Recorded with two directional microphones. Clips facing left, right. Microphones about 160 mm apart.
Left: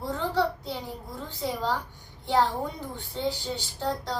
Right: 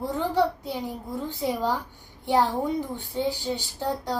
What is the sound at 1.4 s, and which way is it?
A child's voice, 15° right (ahead or behind).